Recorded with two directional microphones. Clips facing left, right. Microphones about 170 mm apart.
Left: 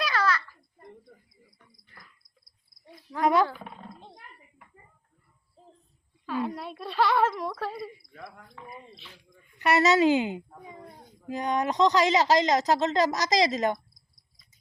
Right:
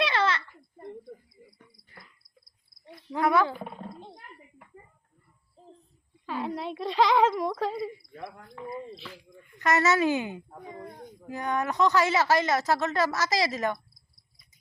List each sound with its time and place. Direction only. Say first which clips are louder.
0.0 s a sound: right 1 dB; 25° right (ahead or behind)
3.2 s speech: left 1 dB; 15° left (ahead or behind)
3.4 s speech: left 1 dB; 5° right (ahead or behind)
6.2 s speech: left 1 dB; 15° right (ahead or behind)
9.6 s speech: left 2 dB; 15° left (ahead or behind)